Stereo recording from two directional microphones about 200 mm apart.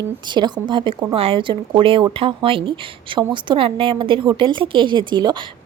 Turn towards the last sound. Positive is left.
turn(degrees=-25)  # may be behind; listen again after turning